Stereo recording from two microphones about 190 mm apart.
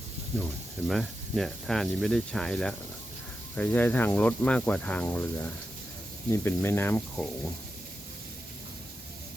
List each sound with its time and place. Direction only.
0.9 s speech: centre (ahead or behind)